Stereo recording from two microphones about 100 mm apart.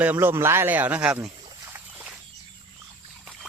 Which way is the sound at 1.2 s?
25° right (ahead or behind).